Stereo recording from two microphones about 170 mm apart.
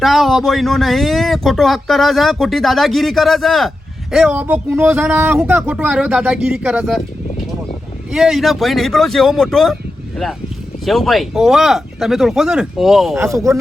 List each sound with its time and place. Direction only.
0.0 s speech: centre (ahead or behind)
8.1 s speech: centre (ahead or behind)
10.8 s speech: centre (ahead or behind)
13.1 s speech: 15° right (ahead or behind)